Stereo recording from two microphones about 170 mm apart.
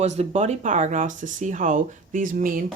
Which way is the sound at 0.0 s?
40° right (ahead or behind).